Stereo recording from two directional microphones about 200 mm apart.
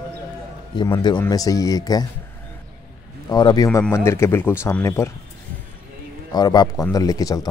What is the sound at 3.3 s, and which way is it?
Speech, 20° left (ahead or behind).